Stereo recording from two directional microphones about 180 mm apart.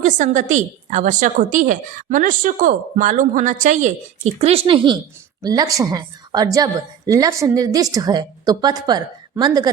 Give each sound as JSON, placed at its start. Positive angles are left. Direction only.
{"t": 0.0, "sound": "a woman's voice", "side_deg": -45}